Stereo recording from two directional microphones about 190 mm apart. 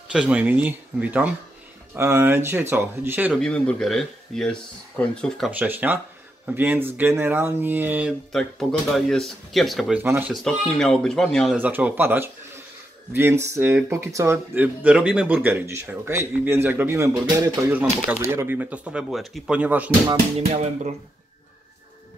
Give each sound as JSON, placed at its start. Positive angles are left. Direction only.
{"t": 0.1, "sound": "speech", "side_deg": -5}
{"t": 3.3, "sound": "speech", "side_deg": 5}
{"t": 5.5, "sound": "speech", "side_deg": -10}
{"t": 10.3, "sound": "speech", "side_deg": 5}
{"t": 11.5, "sound": "speech", "side_deg": -10}
{"t": 20.3, "sound": "music", "side_deg": -35}